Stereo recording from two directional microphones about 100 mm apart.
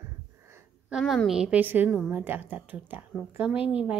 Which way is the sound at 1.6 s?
20° right (ahead or behind).